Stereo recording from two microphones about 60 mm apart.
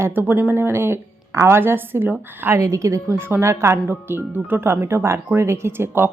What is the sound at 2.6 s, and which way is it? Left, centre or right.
Speech, right.